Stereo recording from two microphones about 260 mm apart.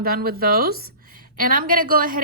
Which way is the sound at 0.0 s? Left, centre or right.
Right.